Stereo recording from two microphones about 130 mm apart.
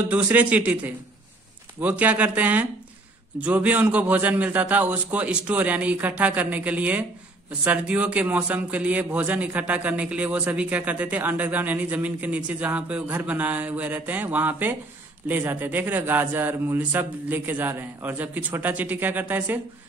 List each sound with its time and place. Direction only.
0.1 s a man's voice: 10° right (ahead or behind)